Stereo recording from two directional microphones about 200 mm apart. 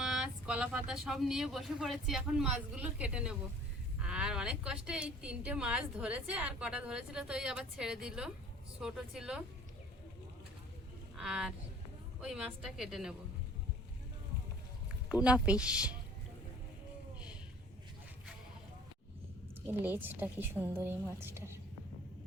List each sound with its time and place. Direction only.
0.0 s speech: 5° right (ahead or behind)
11.2 s speech: 5° right (ahead or behind)
15.1 s speech: 5° right (ahead or behind)
19.6 s a woman's voice: 10° right (ahead or behind)